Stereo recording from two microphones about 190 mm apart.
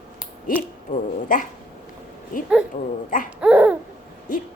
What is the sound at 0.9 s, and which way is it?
Speech, 45° left (ahead or behind).